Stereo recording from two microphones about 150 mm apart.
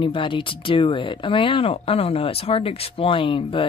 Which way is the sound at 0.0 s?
35° left (ahead or behind).